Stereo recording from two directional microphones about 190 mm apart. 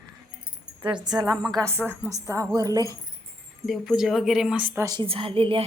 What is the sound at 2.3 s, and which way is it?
Speech, 20° right (ahead or behind).